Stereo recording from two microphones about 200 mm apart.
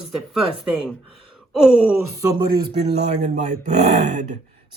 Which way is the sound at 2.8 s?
35° right (ahead or behind).